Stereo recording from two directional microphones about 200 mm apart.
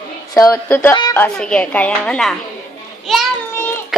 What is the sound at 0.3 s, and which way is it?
A woman's voice, 15° left (ahead or behind).